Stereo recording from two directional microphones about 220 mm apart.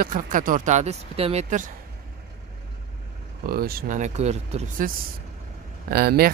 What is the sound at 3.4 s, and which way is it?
Speech, 45° right (ahead or behind).